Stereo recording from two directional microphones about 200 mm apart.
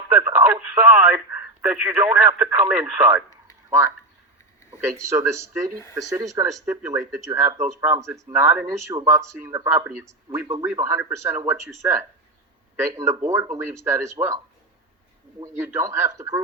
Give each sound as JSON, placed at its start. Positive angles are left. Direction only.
{"t": 0.1, "sound": "speech", "side_deg": -10}
{"t": 15.4, "sound": "speech", "side_deg": -15}